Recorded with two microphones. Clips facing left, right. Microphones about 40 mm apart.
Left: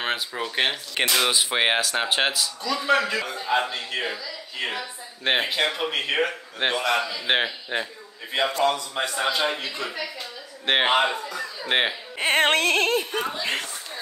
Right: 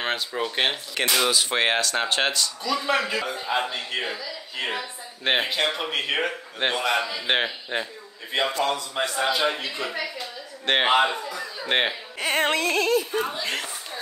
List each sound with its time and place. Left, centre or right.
0.0 s speech: centre
1.2 s a man's voice: centre
7.2 s a man's voice: centre
12.2 s music: left
12.4 s speech: left